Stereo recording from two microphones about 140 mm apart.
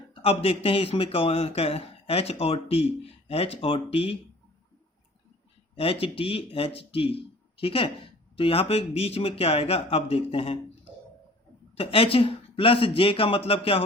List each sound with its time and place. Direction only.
0.1 s speech: 40° left (ahead or behind)
5.7 s speech: 40° left (ahead or behind)
11.8 s speech: 40° left (ahead or behind)